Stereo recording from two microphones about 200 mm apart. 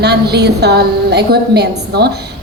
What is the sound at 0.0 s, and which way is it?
A woman's voice, 55° right (ahead or behind).